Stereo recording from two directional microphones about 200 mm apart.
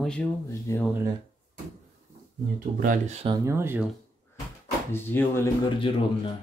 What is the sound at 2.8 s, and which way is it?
Speech, 35° right (ahead or behind).